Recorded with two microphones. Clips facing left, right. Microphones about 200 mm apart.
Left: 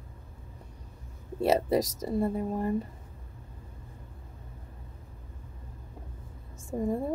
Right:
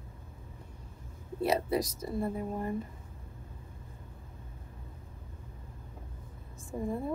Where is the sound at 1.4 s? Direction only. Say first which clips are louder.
Left 5 dB; 40° left (ahead or behind).